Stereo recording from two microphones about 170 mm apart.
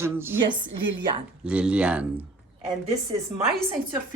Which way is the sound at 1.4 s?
5° right (ahead or behind).